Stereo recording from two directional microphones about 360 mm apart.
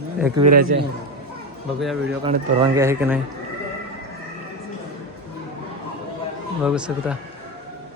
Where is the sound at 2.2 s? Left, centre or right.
Centre.